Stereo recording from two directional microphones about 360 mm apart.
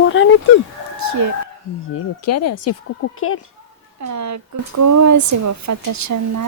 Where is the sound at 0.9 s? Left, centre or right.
Right.